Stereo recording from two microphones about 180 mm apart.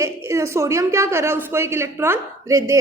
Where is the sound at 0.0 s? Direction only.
15° right (ahead or behind).